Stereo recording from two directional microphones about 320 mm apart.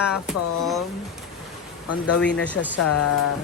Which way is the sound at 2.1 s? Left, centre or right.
Centre.